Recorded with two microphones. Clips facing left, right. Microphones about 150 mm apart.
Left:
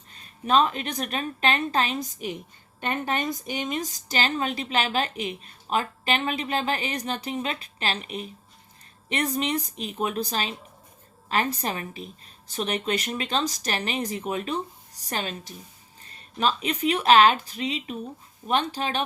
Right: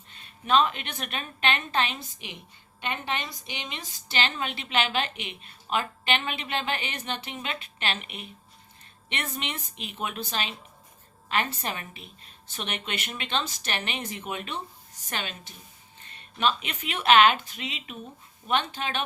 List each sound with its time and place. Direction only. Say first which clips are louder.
0.1 s speech: left 1 dB; 40° left (ahead or behind)